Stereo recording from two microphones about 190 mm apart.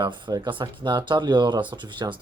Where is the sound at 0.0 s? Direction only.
25° right (ahead or behind).